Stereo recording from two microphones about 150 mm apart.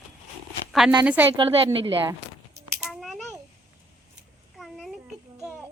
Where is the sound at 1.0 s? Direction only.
10° right (ahead or behind).